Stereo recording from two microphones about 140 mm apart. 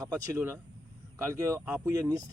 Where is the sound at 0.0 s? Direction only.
20° right (ahead or behind).